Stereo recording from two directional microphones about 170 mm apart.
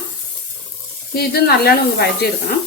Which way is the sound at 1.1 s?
65° left (ahead or behind).